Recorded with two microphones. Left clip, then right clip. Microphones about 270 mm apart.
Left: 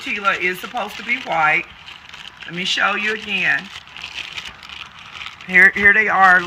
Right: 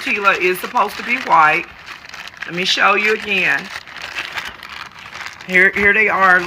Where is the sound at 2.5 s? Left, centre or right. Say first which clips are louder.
Right 5 dB; centre.